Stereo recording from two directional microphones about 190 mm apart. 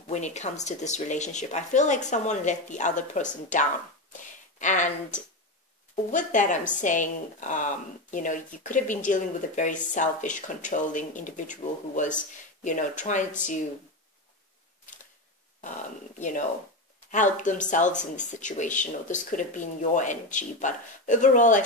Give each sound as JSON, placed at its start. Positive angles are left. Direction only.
{"t": 0.0, "sound": "speech", "side_deg": 40}
{"t": 16.2, "sound": "speech", "side_deg": 40}